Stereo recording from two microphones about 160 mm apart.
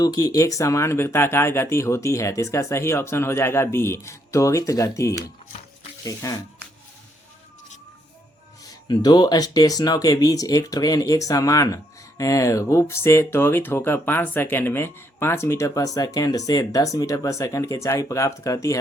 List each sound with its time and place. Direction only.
0.0 s speech: 25° left (ahead or behind)
8.6 s speech: 25° left (ahead or behind)